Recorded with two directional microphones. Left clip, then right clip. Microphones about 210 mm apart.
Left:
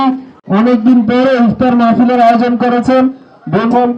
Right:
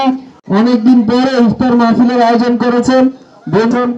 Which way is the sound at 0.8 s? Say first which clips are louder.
Left 1 dB; 25° left (ahead or behind).